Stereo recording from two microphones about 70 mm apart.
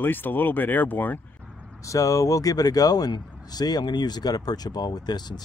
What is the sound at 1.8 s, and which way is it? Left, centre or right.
Speech, left.